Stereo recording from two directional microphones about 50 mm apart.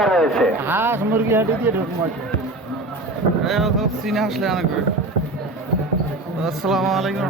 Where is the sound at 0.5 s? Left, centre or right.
Right.